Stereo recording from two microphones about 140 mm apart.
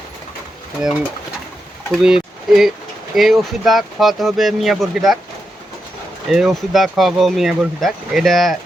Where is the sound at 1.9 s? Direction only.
5° right (ahead or behind).